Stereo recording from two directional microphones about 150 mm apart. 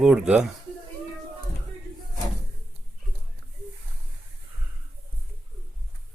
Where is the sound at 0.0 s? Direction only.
5° right (ahead or behind).